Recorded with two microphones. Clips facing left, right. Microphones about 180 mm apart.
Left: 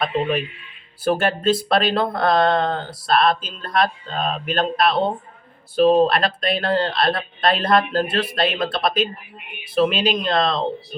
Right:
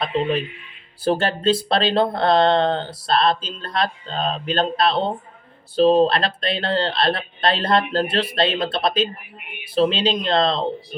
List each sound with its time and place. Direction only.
1.0 s speech: 30° right (ahead or behind)